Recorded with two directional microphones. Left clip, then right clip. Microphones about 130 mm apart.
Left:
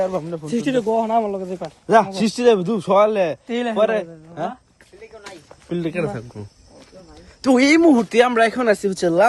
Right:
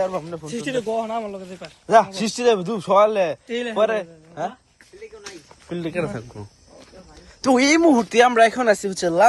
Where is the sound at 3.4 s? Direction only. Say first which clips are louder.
Left 3 dB; 90° left.